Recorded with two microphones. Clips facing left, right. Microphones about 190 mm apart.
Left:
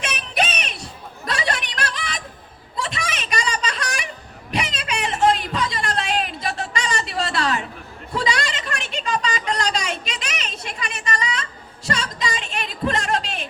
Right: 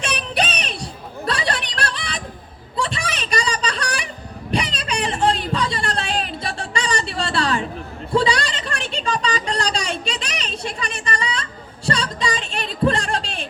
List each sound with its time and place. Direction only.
0.0 s music: 35° right (ahead or behind)
2.7 s a sound: 30° right (ahead or behind)
11.9 s music: 30° right (ahead or behind)